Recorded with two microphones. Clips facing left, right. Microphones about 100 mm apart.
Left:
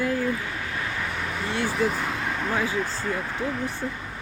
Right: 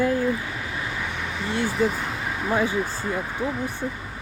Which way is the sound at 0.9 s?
Centre (ahead or behind).